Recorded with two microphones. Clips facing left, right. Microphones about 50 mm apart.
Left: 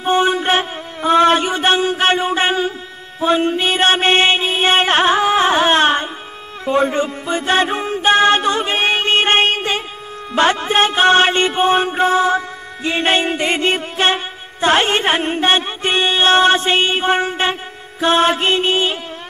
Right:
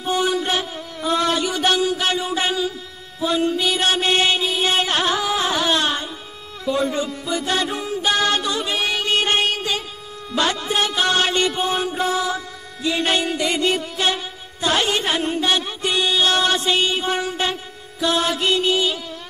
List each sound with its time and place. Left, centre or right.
0.0 s music: left